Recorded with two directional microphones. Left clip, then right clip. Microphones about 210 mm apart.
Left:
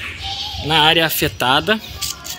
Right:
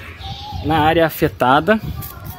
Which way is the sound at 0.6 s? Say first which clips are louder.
Left 1 dB; 40° right (ahead or behind).